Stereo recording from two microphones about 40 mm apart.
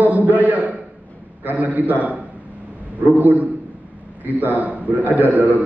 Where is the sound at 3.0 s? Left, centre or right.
Right.